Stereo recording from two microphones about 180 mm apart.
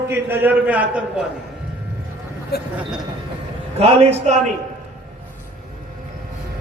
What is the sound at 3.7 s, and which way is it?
Speech, 35° right (ahead or behind).